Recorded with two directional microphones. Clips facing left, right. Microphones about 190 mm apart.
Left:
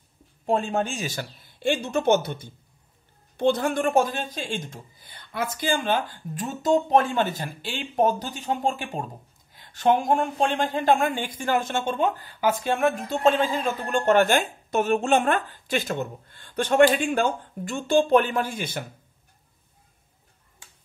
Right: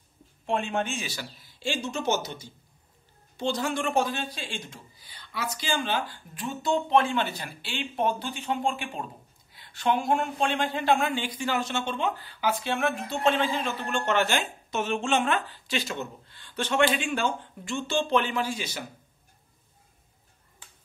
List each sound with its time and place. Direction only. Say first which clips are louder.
0.5 s a man's voice: left 4 dB; 40° left (ahead or behind); by 18.9 s 55° left (ahead or behind)